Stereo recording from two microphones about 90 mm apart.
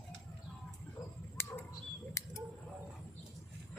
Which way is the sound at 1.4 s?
25° left (ahead or behind).